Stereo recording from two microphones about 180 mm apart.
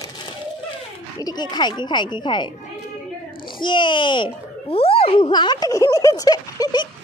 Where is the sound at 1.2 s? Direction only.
20° left (ahead or behind).